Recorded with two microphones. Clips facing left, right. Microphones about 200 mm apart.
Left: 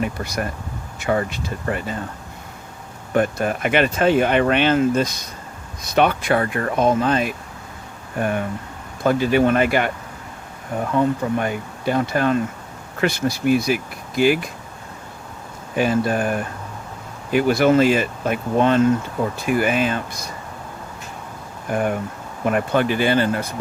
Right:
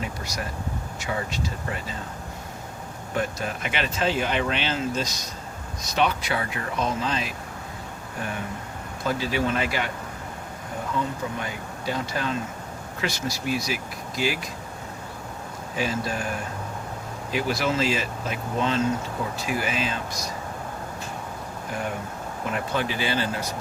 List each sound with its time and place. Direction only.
0.0 s speech: 55° left (ahead or behind)
3.2 s speech: 55° left (ahead or behind)
11.3 s speech: 55° left (ahead or behind)
15.7 s speech: 55° left (ahead or behind)
21.7 s speech: 55° left (ahead or behind)